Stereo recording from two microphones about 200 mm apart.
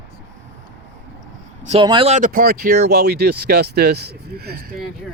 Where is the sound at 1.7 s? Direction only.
25° right (ahead or behind); by 4.7 s 50° right (ahead or behind).